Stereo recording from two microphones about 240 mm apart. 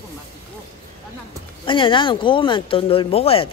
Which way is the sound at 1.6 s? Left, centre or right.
Left.